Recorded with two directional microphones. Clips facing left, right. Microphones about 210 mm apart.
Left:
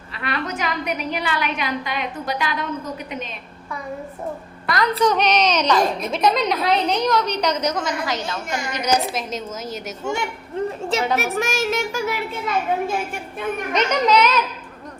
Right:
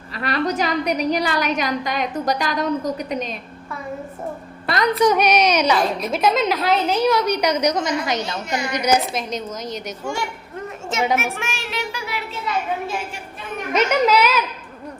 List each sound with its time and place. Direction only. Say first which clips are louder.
0.2 s a woman's voice: right 5 dB; 40° right (ahead or behind)
4.6 s a woman's voice: right 1 dB; 25° right (ahead or behind)
4.9 s a woman's voice: right 2 dB; 10° right (ahead or behind)
11.2 s child singing: left 5 dB; 40° left (ahead or behind)
13.7 s a woman's voice: right 2 dB; 5° right (ahead or behind)